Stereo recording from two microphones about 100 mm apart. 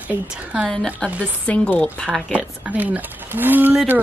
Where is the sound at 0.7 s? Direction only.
5° left (ahead or behind).